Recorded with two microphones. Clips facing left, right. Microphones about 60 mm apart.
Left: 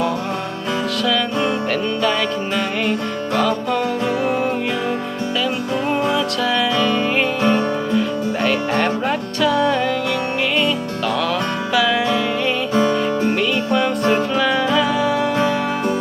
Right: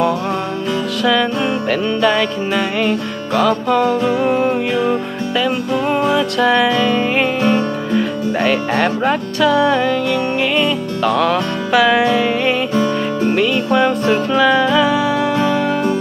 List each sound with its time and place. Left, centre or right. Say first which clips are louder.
2.0 s music: right 6 dB; right
6.1 s music: right 5 dB; right
6.7 s music: right 3 dB; right
7.9 s music: right 2 dB; right
11.2 s music: right 4 dB; right
13.7 s music: right 5 dB; right
14.3 s music: right 5 dB; right